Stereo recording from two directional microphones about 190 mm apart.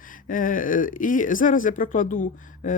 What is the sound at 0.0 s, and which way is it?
Speech, 45° left (ahead or behind).